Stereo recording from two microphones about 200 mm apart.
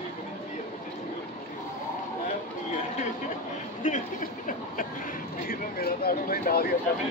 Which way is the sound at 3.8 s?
40° left (ahead or behind).